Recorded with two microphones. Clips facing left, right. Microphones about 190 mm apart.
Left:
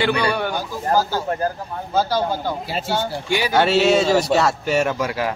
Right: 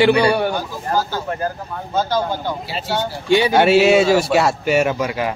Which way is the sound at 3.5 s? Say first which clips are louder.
Right 2 dB; 10° right (ahead or behind).